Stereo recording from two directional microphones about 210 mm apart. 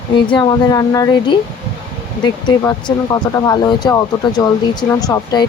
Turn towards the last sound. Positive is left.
turn(degrees=20)  # may be behind; listen again after turning